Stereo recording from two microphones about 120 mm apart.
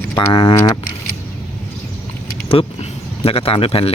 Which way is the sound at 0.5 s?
25° left (ahead or behind).